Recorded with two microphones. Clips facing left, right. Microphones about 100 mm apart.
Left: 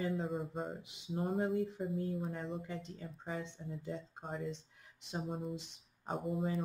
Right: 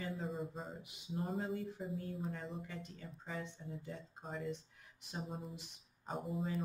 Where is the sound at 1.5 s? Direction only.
Centre (ahead or behind).